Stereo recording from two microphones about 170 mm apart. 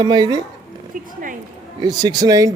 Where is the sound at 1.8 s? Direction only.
25° right (ahead or behind).